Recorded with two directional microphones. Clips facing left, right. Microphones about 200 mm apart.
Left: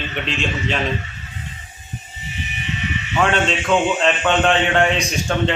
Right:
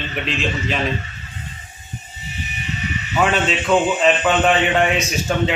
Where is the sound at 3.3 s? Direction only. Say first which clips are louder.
Right 1 dB; 5° right (ahead or behind).